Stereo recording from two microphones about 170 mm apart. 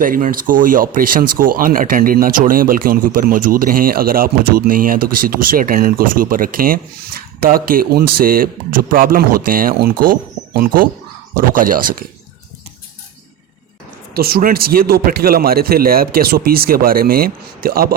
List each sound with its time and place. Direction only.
0.0 s speech: 55° right (ahead or behind)
14.1 s speech: 65° right (ahead or behind)